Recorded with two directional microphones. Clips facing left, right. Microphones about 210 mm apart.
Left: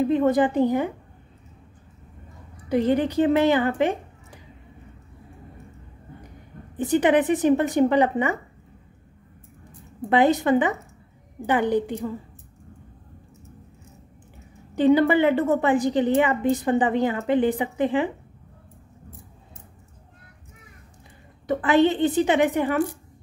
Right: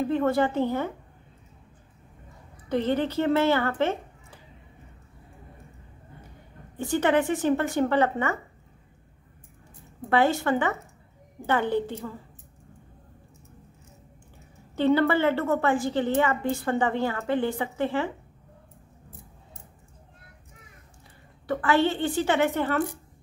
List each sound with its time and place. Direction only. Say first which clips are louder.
0.0 s a woman's voice: left 4 dB; 15° left (ahead or behind)
2.5 s speech: left 4 dB; 10° left (ahead or behind)
6.8 s a woman's voice: left 4 dB; 15° left (ahead or behind)
10.0 s a woman's voice: left 4 dB; 20° left (ahead or behind)
14.8 s a woman's voice: left 4 dB; 15° left (ahead or behind)
21.5 s a woman's voice: left 4 dB; 20° left (ahead or behind)